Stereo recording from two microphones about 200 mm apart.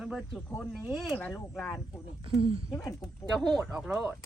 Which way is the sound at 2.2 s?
25° right (ahead or behind).